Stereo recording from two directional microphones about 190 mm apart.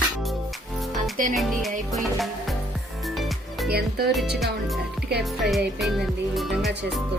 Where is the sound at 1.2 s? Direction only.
45° right (ahead or behind).